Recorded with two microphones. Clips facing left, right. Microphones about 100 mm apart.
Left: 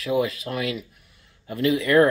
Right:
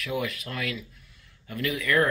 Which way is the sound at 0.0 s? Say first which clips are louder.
Left 7 dB; 25° left (ahead or behind).